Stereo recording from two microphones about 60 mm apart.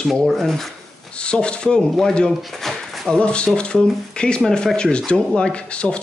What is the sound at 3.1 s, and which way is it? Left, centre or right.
Speech, centre.